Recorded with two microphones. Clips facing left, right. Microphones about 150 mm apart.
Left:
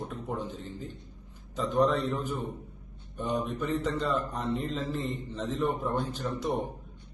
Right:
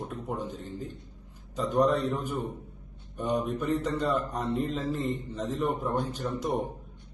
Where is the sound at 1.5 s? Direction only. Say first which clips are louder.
Right 1 dB; 10° right (ahead or behind).